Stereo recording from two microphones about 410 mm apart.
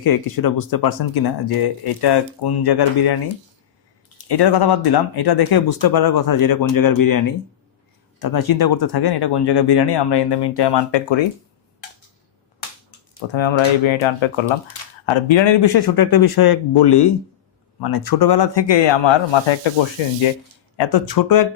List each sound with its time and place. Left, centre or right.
0.0 s speech: left
4.3 s speech: left
13.3 s speech: left
17.7 s speech: left
20.7 s speech: left